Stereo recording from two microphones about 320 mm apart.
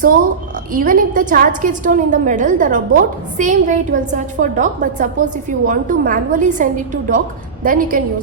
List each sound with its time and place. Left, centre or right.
0.7 s a woman's voice: right